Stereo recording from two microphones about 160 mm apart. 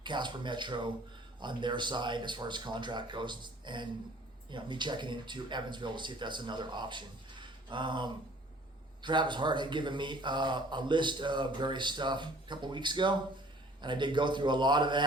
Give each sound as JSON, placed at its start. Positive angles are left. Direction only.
{"t": 0.0, "sound": "speech", "side_deg": -30}